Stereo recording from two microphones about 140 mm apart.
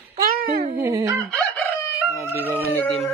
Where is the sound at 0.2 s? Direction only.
85° right.